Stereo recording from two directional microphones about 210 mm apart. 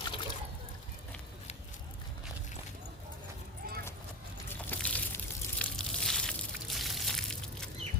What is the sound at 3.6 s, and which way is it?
Vehicle, 45° right (ahead or behind).